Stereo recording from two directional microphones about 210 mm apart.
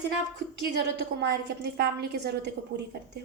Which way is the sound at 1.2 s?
50° right (ahead or behind).